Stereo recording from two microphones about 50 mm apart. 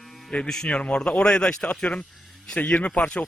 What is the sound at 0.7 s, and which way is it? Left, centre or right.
A man's voice, left.